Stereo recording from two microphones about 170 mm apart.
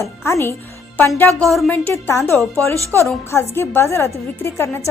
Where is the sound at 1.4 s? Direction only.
Centre (ahead or behind).